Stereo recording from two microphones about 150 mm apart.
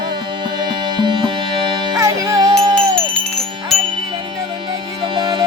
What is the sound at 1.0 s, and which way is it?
Music, 30° right (ahead or behind).